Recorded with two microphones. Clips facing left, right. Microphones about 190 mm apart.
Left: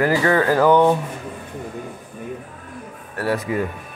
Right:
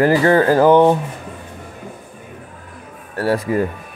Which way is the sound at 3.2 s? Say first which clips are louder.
Right 4 dB; 35° right (ahead or behind).